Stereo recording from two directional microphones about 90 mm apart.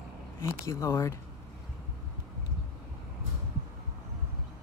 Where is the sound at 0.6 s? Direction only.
35° left (ahead or behind).